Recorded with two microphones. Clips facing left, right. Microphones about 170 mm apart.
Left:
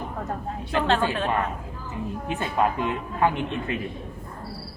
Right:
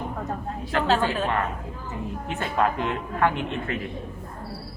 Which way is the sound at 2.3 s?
20° left (ahead or behind).